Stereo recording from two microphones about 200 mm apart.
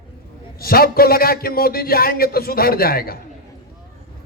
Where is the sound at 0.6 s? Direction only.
50° left (ahead or behind).